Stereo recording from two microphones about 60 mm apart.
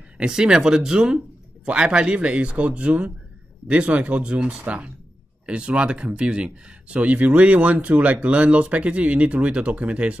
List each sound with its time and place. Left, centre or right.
0.2 s speech: centre